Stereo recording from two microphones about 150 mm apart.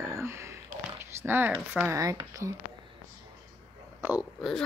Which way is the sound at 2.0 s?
20° right (ahead or behind).